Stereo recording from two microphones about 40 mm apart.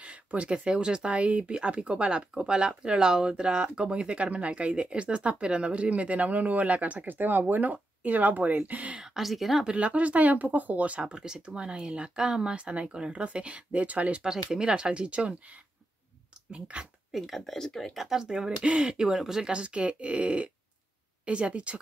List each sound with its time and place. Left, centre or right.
0.0 s speech: right
1.5 s speech: right
9.0 s speech: centre
9.7 s speech: right
11.0 s speech: right
14.2 s speech: centre
16.5 s speech: right
17.1 s speech: centre
17.6 s speech: centre
17.9 s speech: centre
18.6 s speech: right
19.1 s speech: centre
19.5 s speech: right